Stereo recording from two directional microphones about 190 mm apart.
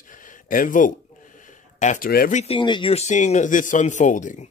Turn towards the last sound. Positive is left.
turn(degrees=40)  # may be behind; listen again after turning